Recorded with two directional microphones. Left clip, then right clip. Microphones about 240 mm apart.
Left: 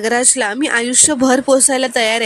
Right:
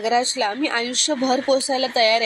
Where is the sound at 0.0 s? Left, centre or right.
Left.